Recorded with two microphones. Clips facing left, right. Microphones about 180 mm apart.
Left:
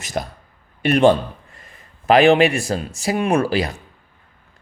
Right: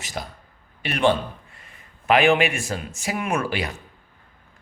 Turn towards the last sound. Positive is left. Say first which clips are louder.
# left 7 dB
turn(degrees=35)  # may be behind; listen again after turning